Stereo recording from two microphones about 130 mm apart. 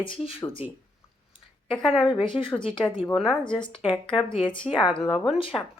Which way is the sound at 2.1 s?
40° left (ahead or behind).